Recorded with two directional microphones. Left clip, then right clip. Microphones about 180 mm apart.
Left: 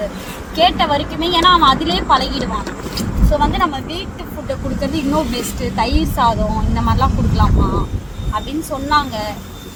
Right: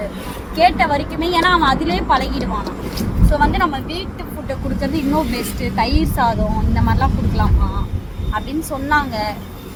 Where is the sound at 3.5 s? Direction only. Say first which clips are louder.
Left 1 dB; 5° left (ahead or behind).